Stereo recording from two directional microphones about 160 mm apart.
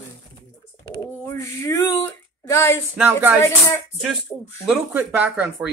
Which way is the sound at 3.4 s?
20° left (ahead or behind).